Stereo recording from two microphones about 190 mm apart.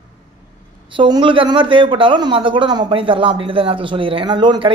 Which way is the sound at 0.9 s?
25° right (ahead or behind).